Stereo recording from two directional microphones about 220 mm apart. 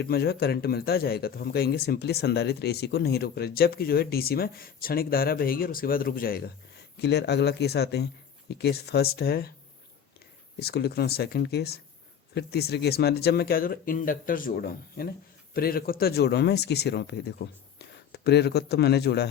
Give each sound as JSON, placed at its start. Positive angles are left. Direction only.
{"t": 0.0, "sound": "speech", "side_deg": 45}
{"t": 10.6, "sound": "speech", "side_deg": 45}